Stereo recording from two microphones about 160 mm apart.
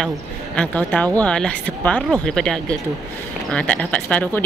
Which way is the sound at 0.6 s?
10° left (ahead or behind).